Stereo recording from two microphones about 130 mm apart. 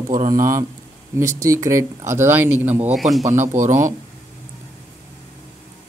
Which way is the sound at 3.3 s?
20° right (ahead or behind).